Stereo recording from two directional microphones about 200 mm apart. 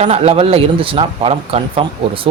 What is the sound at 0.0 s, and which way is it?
Speech, 30° right (ahead or behind).